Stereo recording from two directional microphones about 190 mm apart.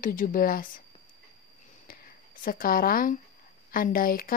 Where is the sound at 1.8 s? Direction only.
45° left (ahead or behind).